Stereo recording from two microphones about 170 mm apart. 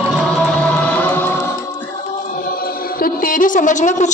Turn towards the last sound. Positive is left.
turn(degrees=45)  # may be behind; listen again after turning